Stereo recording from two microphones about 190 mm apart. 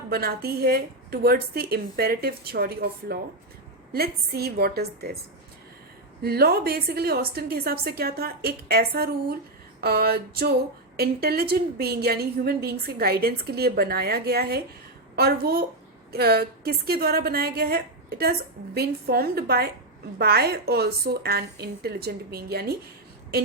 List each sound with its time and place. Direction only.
0.1 s a woman's voice: 55° right (ahead or behind)
6.2 s a woman's voice: 55° right (ahead or behind)
9.8 s a sound: 55° right (ahead or behind)
10.9 s a woman's voice: 55° right (ahead or behind)